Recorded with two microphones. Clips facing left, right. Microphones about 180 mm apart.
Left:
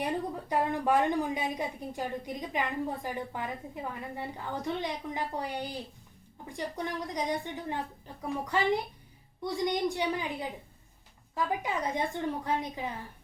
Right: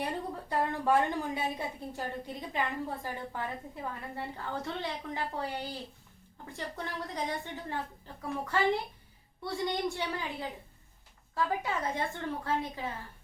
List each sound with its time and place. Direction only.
0.0 s a woman's voice: 15° left (ahead or behind)